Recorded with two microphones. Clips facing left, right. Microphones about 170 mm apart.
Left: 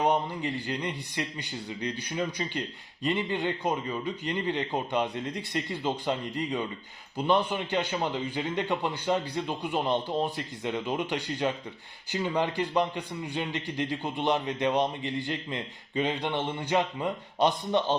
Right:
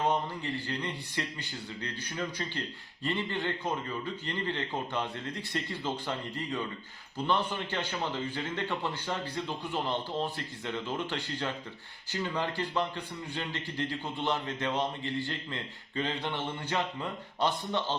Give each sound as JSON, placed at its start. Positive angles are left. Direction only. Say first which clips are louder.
{"t": 0.0, "sound": "speech", "louder": "left 4 dB", "side_deg": 15}